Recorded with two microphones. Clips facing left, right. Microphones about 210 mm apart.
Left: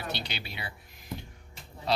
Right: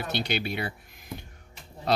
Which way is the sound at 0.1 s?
50° right (ahead or behind).